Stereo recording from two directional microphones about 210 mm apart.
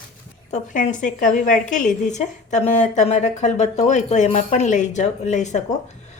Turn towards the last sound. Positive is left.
turn(degrees=35)  # may be behind; listen again after turning